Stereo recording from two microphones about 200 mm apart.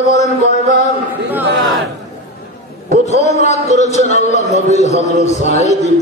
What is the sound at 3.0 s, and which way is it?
A man's voice, 35° left (ahead or behind).